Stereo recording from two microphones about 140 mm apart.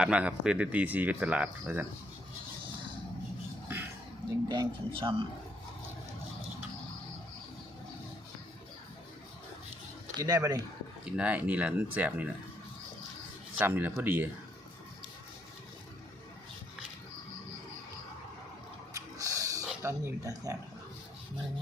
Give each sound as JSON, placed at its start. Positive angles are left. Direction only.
{"t": 0.0, "sound": "speech", "side_deg": -10}
{"t": 4.4, "sound": "speech", "side_deg": -30}
{"t": 10.2, "sound": "speech", "side_deg": -25}
{"t": 11.0, "sound": "speech", "side_deg": -10}
{"t": 13.6, "sound": "speech", "side_deg": -15}
{"t": 18.9, "sound": "snort", "side_deg": -25}
{"t": 19.8, "sound": "speech", "side_deg": -20}